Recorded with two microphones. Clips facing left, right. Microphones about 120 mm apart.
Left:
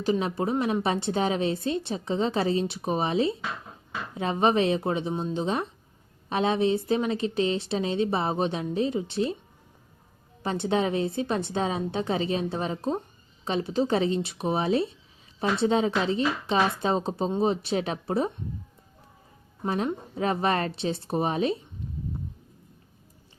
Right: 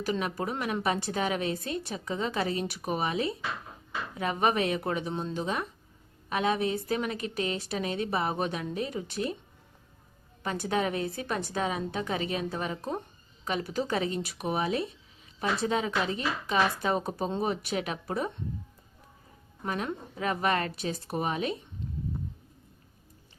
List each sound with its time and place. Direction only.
0.0 s a woman's voice: 25° left (ahead or behind)
10.4 s a woman's voice: 25° left (ahead or behind)
19.6 s a woman's voice: 30° left (ahead or behind)